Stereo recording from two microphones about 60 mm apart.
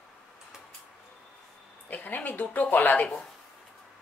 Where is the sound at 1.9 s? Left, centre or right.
Left.